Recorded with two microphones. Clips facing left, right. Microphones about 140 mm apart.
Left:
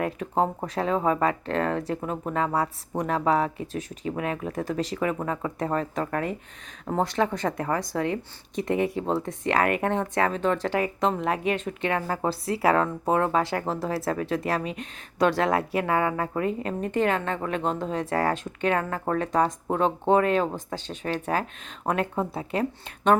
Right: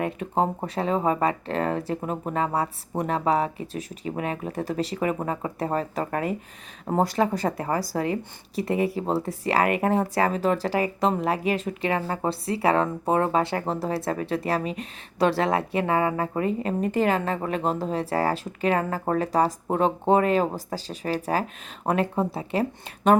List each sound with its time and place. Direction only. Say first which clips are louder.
0.0 s a woman's voice: even; centre (ahead or behind)
5.0 s a woman's voice: right 1 dB; 15° right (ahead or behind)